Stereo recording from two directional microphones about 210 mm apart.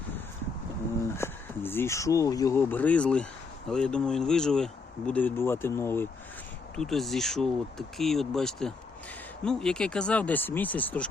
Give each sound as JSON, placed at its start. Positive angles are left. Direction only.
{"t": 1.1, "sound": "speech", "side_deg": 10}